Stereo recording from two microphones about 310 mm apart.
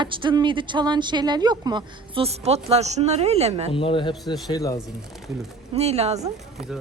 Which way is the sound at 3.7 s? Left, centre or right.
Centre.